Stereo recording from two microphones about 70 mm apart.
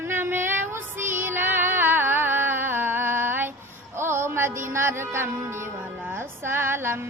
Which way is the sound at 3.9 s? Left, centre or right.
Right.